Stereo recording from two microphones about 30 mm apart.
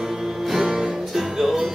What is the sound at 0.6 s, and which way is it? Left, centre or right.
Music, right.